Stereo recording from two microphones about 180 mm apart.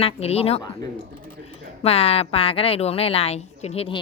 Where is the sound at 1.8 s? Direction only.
35° left (ahead or behind).